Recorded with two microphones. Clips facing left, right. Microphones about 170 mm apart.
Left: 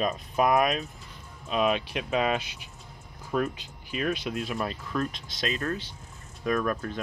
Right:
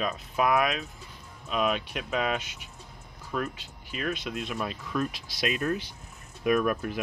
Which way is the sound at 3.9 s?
5° left (ahead or behind).